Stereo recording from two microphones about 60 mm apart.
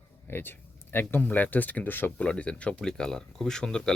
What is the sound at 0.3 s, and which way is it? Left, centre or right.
Speech, left.